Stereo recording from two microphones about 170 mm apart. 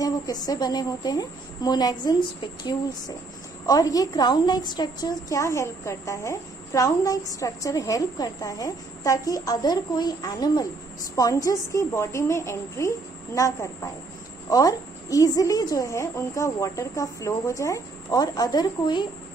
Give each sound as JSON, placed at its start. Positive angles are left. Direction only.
{"t": 0.0, "sound": "a woman's voice", "side_deg": 20}